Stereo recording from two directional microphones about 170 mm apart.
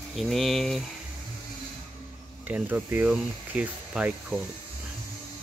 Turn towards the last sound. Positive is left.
turn(degrees=-5)  # may be behind; listen again after turning